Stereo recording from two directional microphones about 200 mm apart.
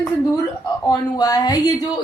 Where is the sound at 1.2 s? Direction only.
20° left (ahead or behind).